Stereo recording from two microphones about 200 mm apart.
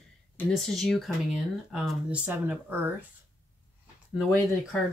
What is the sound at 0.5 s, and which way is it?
Speech, centre (ahead or behind).